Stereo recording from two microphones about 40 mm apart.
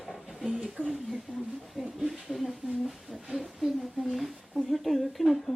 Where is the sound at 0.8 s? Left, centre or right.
Right.